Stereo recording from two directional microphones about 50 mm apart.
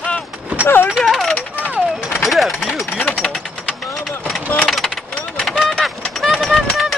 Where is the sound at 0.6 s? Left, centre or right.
Left.